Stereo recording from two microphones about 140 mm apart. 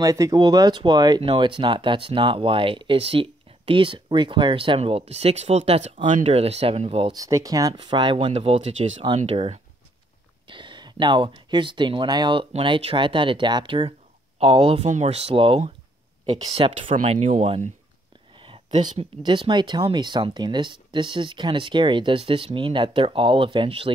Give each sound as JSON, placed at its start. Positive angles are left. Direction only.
{"t": 0.0, "sound": "speech", "side_deg": -25}
{"t": 7.1, "sound": "speech", "side_deg": -25}
{"t": 8.3, "sound": "speech", "side_deg": -45}
{"t": 10.4, "sound": "speech", "side_deg": -35}
{"t": 14.9, "sound": "speech", "side_deg": -55}
{"t": 18.3, "sound": "a sound", "side_deg": -40}
{"t": 19.2, "sound": "speech", "side_deg": -35}